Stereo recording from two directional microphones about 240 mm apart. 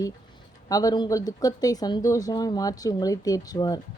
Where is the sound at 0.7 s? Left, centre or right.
Centre.